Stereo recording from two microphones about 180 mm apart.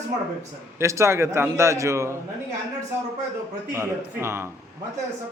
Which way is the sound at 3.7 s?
15° right (ahead or behind).